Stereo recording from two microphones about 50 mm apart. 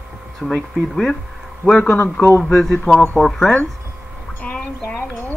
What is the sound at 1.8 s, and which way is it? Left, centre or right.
Speech, left.